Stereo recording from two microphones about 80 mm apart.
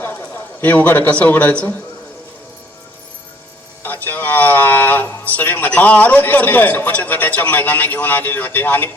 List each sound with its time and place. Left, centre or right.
0.0 s a man's voice: left
3.8 s a man's voice: left